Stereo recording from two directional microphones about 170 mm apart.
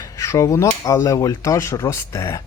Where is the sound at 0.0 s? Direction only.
20° left (ahead or behind).